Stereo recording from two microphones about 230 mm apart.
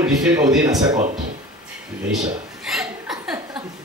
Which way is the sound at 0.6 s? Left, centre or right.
Centre.